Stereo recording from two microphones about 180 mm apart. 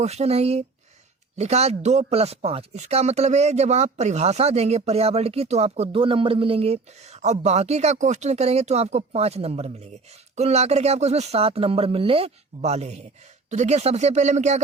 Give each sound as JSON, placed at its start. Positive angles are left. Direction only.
{"t": 0.0, "sound": "speech", "side_deg": -35}